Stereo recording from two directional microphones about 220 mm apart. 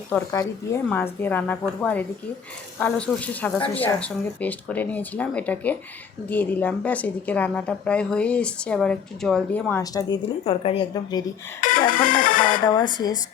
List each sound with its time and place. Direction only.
0.1 s a woman's voice: 10° left (ahead or behind)
10.4 s a woman's voice: 25° left (ahead or behind)
11.9 s speech: 40° left (ahead or behind)
12.6 s a woman's voice: 20° left (ahead or behind)